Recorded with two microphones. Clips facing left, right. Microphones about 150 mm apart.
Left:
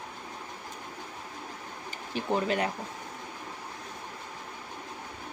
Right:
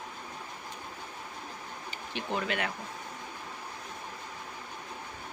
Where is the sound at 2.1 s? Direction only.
40° left (ahead or behind).